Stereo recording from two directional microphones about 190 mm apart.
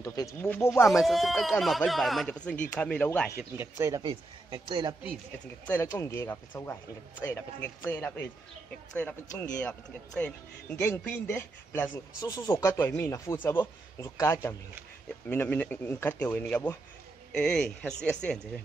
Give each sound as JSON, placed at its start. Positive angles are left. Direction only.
{"t": 0.0, "sound": "speech", "side_deg": 15}
{"t": 0.8, "sound": "speech", "side_deg": 0}
{"t": 3.5, "sound": "speech", "side_deg": -15}
{"t": 4.0, "sound": "a man's voice", "side_deg": -25}
{"t": 5.7, "sound": "speech", "side_deg": 10}
{"t": 9.3, "sound": "speech", "side_deg": 10}